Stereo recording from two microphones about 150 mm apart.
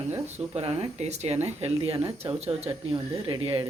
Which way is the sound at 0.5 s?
40° right (ahead or behind).